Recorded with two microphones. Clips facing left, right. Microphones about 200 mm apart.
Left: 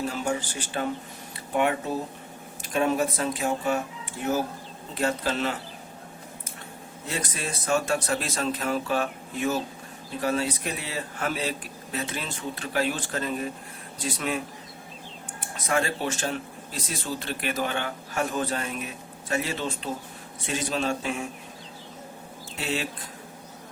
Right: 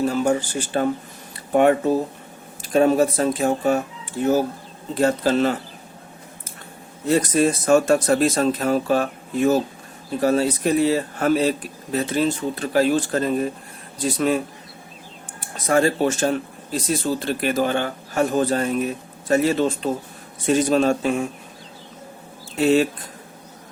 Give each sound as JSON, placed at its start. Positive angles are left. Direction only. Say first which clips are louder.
{"t": 0.0, "sound": "speech", "louder": "right 8 dB", "side_deg": -45}
{"t": 7.1, "sound": "speech", "louder": "right 15 dB", "side_deg": -45}
{"t": 15.6, "sound": "speech", "louder": "right 9 dB", "side_deg": -40}
{"t": 22.5, "sound": "speech", "louder": "right 14 dB", "side_deg": -45}